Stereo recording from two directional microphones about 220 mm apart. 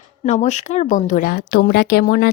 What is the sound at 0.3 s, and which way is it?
A woman's voice, 30° left (ahead or behind).